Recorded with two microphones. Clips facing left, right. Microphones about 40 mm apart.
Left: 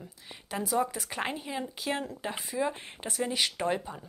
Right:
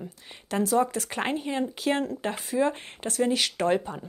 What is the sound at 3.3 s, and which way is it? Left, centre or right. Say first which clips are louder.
Speech: right 5 dB; centre.